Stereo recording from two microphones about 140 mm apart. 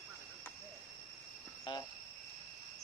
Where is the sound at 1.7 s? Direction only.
35° left (ahead or behind).